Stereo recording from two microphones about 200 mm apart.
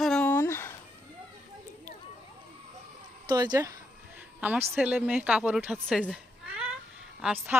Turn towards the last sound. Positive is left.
turn(degrees=-5)  # may be behind; listen again after turning